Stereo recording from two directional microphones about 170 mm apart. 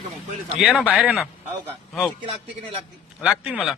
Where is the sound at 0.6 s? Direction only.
Centre (ahead or behind).